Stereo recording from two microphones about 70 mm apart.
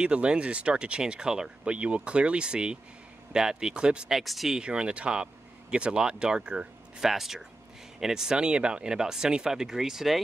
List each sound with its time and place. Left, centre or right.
0.0 s speech: centre
4.2 s speech: centre